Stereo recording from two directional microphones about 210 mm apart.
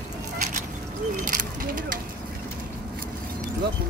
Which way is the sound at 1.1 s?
40° right (ahead or behind).